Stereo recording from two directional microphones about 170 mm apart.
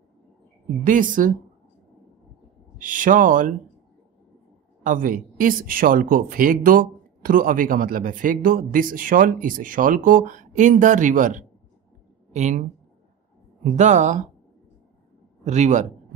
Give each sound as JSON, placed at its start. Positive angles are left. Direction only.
{"t": 0.8, "sound": "speech", "side_deg": -50}
{"t": 2.8, "sound": "speech", "side_deg": -50}
{"t": 4.8, "sound": "a woman's voice", "side_deg": -50}
{"t": 13.7, "sound": "speech", "side_deg": -45}
{"t": 15.4, "sound": "speech", "side_deg": -45}